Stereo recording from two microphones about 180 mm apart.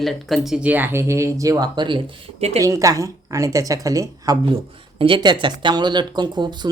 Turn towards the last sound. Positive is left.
turn(degrees=-25)  # may be behind; listen again after turning